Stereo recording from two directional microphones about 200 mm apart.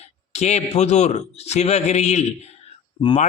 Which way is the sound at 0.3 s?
35° left (ahead or behind).